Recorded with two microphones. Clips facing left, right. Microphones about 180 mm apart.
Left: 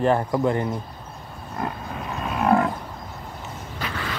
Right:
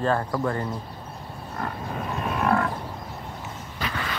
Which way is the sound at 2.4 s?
20° left (ahead or behind).